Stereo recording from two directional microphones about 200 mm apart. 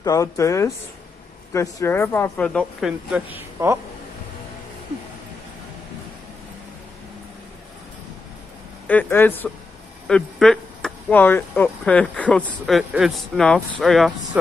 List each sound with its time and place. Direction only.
0.0 s speech: 15° left (ahead or behind); by 3.7 s 10° right (ahead or behind)
8.8 s speech: 10° left (ahead or behind)